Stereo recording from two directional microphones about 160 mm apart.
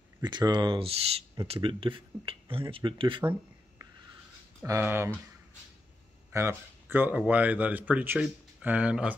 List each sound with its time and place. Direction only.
0.2 s speech: 25° right (ahead or behind)
4.6 s speech: 15° right (ahead or behind)
6.3 s speech: 15° right (ahead or behind)